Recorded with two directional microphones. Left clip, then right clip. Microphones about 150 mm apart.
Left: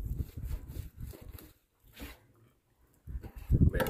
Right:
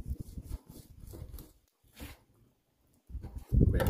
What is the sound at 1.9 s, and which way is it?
Dog, centre (ahead or behind).